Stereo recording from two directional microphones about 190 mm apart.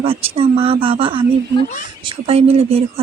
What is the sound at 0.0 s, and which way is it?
A woman's voice, 30° right (ahead or behind).